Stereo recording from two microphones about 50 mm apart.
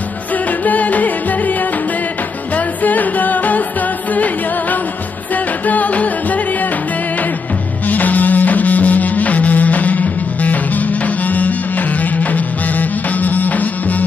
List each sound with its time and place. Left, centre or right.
0.5 s music: left
2.5 s music: left
7.9 s music: left